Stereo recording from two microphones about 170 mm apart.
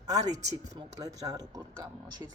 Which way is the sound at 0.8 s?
20° right (ahead or behind).